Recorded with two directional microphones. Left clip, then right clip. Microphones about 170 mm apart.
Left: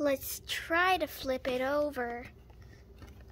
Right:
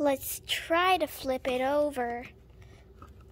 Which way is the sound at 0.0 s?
15° right (ahead or behind).